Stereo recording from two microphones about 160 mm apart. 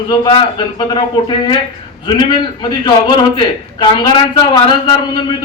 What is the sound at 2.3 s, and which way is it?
A man's voice, 25° left (ahead or behind).